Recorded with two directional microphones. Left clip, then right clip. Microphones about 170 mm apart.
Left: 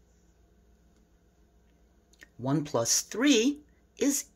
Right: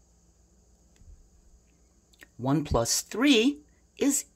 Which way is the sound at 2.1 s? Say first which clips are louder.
Right 3 dB; 20° right (ahead or behind).